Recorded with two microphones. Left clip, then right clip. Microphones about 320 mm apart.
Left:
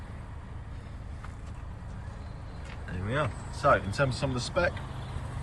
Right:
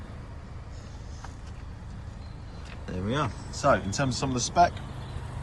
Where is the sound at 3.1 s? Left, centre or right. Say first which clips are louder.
Even; centre.